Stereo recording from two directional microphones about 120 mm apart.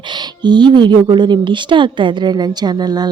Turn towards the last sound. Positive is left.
turn(degrees=-35)  # may be behind; listen again after turning